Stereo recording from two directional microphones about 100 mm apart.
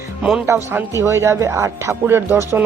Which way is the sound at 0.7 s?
30° right (ahead or behind).